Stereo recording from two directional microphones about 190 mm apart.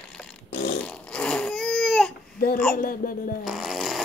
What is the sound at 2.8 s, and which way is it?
Female singing, 50° left (ahead or behind).